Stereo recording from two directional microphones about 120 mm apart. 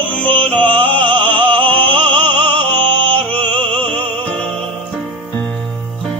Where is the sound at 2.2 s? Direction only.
40° right (ahead or behind).